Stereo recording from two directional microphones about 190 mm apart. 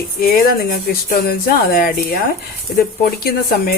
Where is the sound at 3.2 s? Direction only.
50° left (ahead or behind).